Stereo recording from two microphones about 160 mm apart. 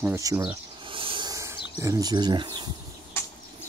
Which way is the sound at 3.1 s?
15° left (ahead or behind).